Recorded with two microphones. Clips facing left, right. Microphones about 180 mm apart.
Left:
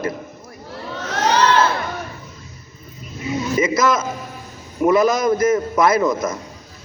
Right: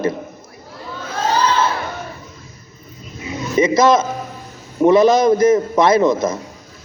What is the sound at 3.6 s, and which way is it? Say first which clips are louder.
Speech: right 6 dB; 20° right (ahead or behind).